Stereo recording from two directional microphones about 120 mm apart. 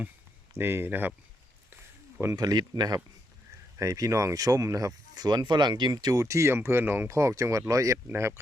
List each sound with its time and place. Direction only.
0.5 s speech: 20° right (ahead or behind)
2.2 s speech: 35° right (ahead or behind)